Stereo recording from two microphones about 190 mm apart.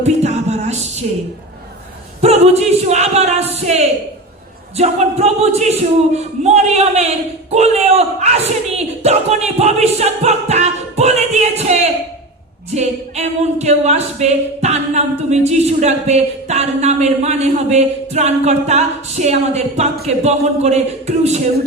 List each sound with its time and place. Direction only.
0.0 s speech: 35° right (ahead or behind)
2.2 s speech: 35° right (ahead or behind)